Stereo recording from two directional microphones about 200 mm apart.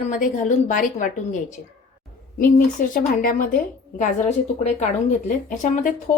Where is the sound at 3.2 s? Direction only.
45° left (ahead or behind).